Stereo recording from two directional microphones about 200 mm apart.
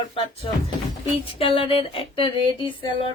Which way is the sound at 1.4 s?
25° left (ahead or behind).